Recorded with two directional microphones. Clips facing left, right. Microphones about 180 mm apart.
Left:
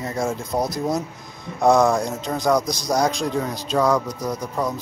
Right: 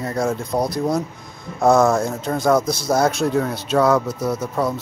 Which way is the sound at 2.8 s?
15° left (ahead or behind).